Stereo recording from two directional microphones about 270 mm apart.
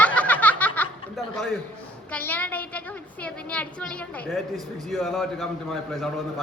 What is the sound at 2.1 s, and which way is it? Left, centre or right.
Speech, centre.